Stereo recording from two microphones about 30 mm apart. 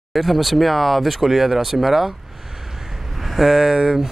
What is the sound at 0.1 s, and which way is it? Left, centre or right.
Speech, centre.